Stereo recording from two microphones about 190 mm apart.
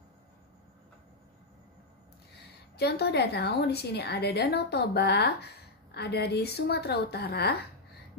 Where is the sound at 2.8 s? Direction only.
60° left (ahead or behind).